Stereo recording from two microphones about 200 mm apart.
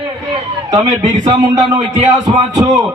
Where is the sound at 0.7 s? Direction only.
20° right (ahead or behind).